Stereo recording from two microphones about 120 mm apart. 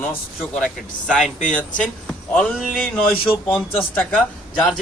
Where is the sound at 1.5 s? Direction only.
10° left (ahead or behind).